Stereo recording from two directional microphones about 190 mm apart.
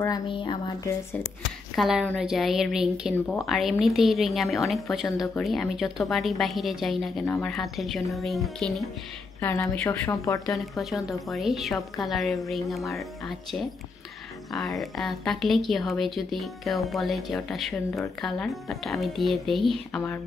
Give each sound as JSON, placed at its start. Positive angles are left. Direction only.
{"t": 0.0, "sound": "speech", "side_deg": 20}
{"t": 1.8, "sound": "a woman's voice", "side_deg": -5}
{"t": 7.2, "sound": "a woman's voice", "side_deg": 15}
{"t": 7.5, "sound": "a woman's voice", "side_deg": 0}
{"t": 9.4, "sound": "a woman's voice", "side_deg": 10}
{"t": 10.5, "sound": "a woman's voice", "side_deg": 0}